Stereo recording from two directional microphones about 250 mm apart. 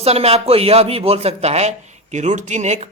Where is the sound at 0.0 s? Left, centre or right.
Right.